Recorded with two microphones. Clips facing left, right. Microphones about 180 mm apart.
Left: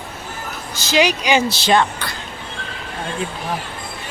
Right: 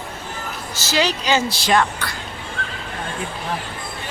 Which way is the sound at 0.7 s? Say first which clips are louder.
Left 4 dB; 15° left (ahead or behind).